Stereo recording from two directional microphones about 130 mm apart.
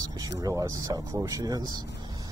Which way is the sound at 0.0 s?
25° right (ahead or behind).